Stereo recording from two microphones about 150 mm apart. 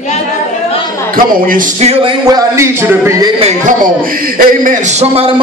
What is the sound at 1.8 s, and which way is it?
Speech, 40° right (ahead or behind).